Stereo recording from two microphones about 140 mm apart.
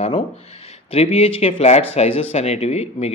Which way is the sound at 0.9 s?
45° left (ahead or behind).